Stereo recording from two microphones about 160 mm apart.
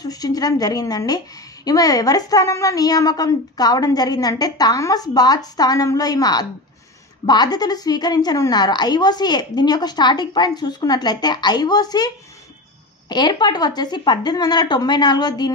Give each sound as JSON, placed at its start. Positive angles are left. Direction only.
{"t": 0.0, "sound": "a woman's voice", "side_deg": 25}
{"t": 13.1, "sound": "a woman's voice", "side_deg": 25}